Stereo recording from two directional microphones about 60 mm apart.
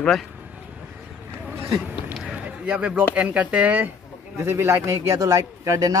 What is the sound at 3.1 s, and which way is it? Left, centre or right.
Speech, right.